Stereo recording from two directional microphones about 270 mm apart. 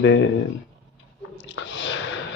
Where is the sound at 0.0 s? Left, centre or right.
Left.